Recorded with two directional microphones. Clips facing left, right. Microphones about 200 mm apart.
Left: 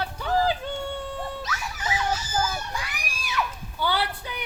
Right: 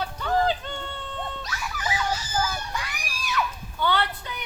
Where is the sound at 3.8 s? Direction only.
10° left (ahead or behind).